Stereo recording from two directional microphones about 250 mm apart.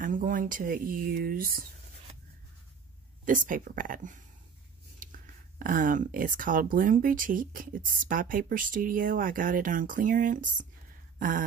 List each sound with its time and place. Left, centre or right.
0.0 s speech: right
3.3 s speech: right
5.0 s scissors: right
5.6 s speech: right
11.1 s a sound: right